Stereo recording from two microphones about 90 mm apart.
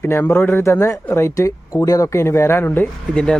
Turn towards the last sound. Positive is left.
turn(degrees=10)  # may be behind; listen again after turning